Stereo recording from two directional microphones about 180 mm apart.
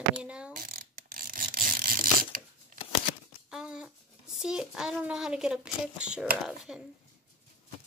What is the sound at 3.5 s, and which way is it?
A child's voice, 5° right (ahead or behind).